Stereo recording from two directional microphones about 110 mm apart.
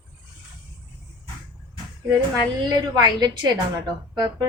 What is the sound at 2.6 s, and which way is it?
A woman's voice, 40° right (ahead or behind).